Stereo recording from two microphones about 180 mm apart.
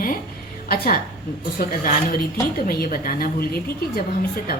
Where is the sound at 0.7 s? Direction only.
55° left (ahead or behind).